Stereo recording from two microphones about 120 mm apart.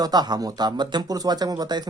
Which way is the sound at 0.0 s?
35° right (ahead or behind).